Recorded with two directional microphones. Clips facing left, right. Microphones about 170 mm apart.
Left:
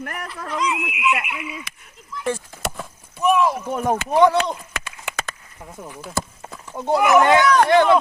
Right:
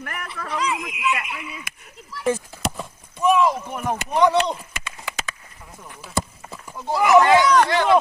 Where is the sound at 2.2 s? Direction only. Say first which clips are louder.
Right 2 dB; 5° right (ahead or behind).